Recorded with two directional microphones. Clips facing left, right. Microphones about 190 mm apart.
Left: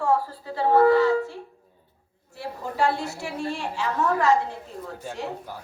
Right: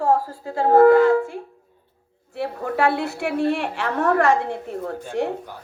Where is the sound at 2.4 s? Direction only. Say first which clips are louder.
Right 4 dB; 60° right (ahead or behind).